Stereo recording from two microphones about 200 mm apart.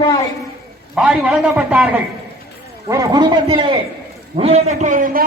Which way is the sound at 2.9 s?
20° right (ahead or behind).